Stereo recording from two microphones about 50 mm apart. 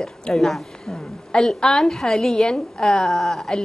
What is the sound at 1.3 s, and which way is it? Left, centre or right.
Speech, centre.